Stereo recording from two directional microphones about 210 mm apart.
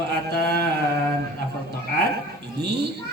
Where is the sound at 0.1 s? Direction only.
50° right (ahead or behind).